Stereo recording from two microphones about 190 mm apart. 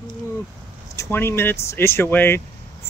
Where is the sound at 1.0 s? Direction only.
10° left (ahead or behind).